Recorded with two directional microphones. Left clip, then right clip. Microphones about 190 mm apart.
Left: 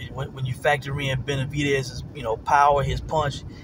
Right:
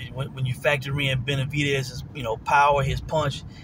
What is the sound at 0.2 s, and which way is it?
Speech, 15° right (ahead or behind).